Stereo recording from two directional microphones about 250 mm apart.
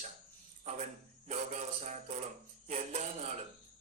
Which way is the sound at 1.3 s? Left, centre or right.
Right.